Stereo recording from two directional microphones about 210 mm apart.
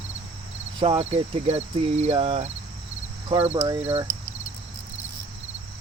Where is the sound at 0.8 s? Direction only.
30° right (ahead or behind).